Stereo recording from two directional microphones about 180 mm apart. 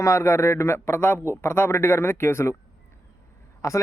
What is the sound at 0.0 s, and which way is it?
Speech, 15° left (ahead or behind).